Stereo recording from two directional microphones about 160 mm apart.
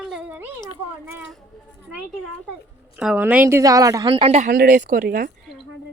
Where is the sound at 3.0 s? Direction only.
10° right (ahead or behind).